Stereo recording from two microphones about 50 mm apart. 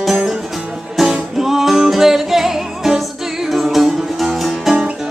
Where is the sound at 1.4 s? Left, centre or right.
Centre.